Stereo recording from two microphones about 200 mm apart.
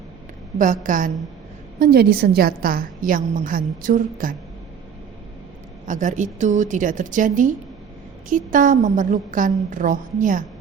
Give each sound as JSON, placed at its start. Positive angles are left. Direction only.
{"t": 0.6, "sound": "a woman's voice", "side_deg": -40}
{"t": 5.8, "sound": "a woman's voice", "side_deg": -40}